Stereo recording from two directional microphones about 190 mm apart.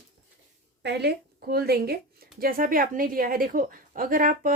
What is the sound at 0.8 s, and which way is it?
A woman's voice, 60° right (ahead or behind).